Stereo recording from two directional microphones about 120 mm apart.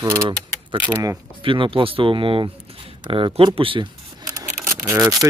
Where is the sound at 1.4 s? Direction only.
45° right (ahead or behind).